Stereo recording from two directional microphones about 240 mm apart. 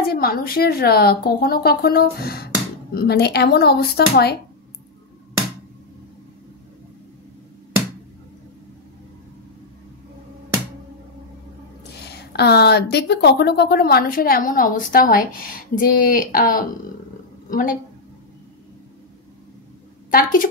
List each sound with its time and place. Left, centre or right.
0.0 s a woman's voice: left
12.0 s a woman's voice: left
20.1 s a woman's voice: left